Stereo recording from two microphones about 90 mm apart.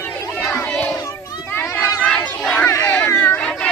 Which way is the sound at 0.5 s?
20° left (ahead or behind).